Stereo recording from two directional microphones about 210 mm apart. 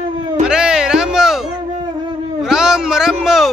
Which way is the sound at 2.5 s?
5° right (ahead or behind).